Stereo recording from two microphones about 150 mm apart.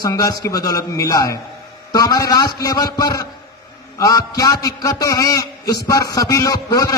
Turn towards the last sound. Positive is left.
turn(degrees=25)  # may be behind; listen again after turning